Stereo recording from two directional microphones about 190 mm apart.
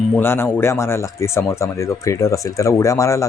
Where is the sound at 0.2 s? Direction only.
10° left (ahead or behind).